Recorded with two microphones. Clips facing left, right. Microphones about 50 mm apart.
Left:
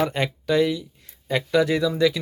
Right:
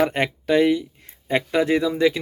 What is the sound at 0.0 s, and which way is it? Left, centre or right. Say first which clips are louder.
Speech: right 3 dB; right.